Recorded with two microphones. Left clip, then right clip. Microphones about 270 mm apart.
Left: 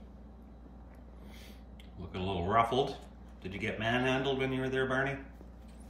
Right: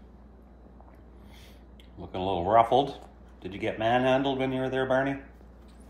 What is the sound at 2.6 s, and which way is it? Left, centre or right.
Speech, centre.